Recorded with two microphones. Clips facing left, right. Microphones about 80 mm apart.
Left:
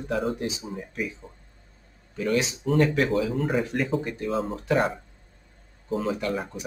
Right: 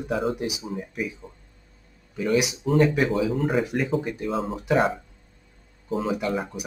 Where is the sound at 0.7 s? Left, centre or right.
Centre.